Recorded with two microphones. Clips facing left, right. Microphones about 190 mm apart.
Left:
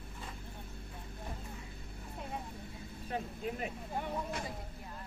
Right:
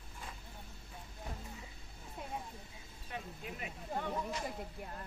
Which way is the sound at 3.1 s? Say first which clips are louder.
Left 7 dB; 35° left (ahead or behind).